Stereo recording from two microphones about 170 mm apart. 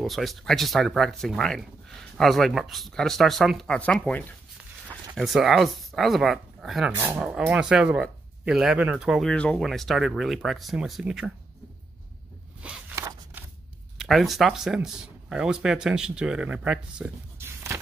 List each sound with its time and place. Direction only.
0.0 s speech: centre (ahead or behind)
12.9 s scissors: 15° right (ahead or behind)
13.9 s speech: centre (ahead or behind)